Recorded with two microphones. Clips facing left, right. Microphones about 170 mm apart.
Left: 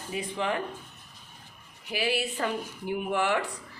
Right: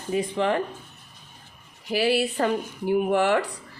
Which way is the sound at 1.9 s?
35° right (ahead or behind).